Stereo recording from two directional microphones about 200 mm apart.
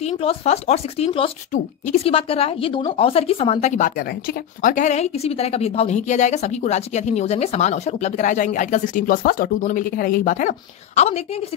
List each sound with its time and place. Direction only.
0.0 s a woman's voice: 30° left (ahead or behind)